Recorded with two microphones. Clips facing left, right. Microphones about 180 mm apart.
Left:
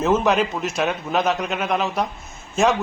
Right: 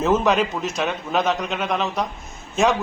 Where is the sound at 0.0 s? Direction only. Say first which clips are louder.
Even; centre (ahead or behind).